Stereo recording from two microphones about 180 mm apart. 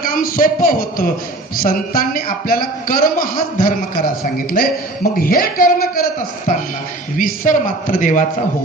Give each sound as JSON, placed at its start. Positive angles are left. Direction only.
{"t": 0.0, "sound": "a man's voice", "side_deg": 50}
{"t": 7.2, "sound": "a man's voice", "side_deg": 50}